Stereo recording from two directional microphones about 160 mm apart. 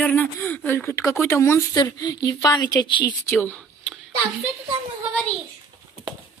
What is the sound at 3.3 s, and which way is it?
Speech, 10° left (ahead or behind).